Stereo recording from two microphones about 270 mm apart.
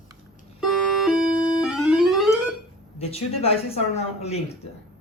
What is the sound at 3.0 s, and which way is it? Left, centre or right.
Speech, left.